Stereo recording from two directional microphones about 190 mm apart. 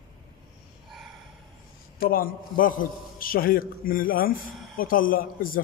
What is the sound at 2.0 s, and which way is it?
A man's voice, 50° left (ahead or behind).